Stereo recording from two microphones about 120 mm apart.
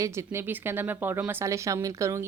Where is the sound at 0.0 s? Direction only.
25° right (ahead or behind).